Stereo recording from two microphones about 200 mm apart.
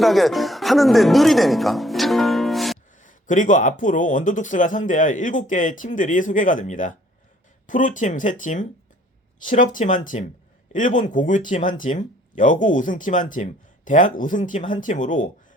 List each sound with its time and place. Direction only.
0.0 s speech: centre (ahead or behind)
3.0 s speech: 40° left (ahead or behind)